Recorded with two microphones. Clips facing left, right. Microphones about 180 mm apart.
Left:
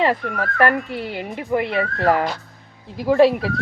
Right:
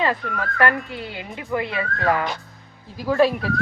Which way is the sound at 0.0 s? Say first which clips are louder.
Left 3 dB; 30° left (ahead or behind).